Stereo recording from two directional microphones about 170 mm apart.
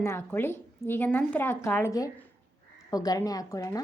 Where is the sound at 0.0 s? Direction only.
15° left (ahead or behind).